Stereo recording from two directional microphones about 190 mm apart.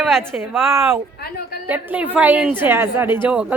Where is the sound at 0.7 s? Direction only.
15° right (ahead or behind).